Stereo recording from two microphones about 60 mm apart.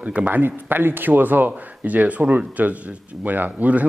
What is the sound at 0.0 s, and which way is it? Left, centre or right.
Speech, right.